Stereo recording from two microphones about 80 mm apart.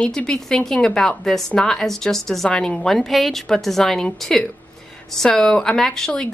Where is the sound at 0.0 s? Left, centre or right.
Centre.